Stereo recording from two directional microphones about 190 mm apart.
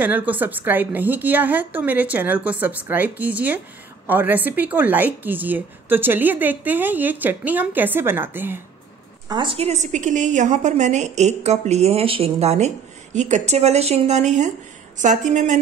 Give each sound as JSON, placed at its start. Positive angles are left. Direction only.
{"t": 0.0, "sound": "a woman's voice", "side_deg": -10}
{"t": 9.3, "sound": "a woman's voice", "side_deg": -25}